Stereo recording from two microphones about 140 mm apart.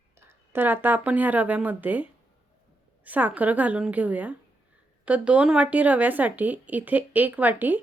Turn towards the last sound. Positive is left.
turn(degrees=-15)  # may be behind; listen again after turning